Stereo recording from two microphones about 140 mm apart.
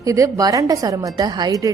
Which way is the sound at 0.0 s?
25° right (ahead or behind).